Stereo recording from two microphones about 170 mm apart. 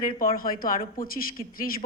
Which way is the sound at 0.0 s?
55° left (ahead or behind).